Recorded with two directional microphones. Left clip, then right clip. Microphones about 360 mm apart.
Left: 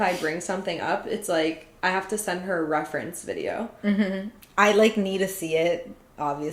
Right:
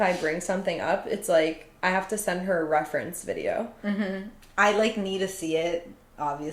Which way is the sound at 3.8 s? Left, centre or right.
Centre.